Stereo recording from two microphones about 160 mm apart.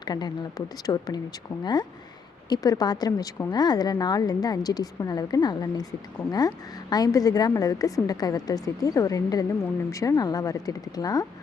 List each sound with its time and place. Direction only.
0.0 s a woman's voice: 25° left (ahead or behind)